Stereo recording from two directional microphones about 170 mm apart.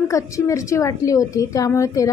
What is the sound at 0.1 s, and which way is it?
A woman's voice, 20° left (ahead or behind).